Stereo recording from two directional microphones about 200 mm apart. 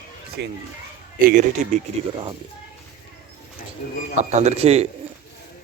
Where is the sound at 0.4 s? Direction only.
55° right (ahead or behind).